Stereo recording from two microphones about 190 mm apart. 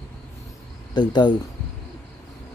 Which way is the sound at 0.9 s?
25° left (ahead or behind).